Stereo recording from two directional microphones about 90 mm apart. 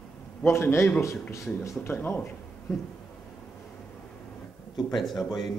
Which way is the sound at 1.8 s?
25° left (ahead or behind).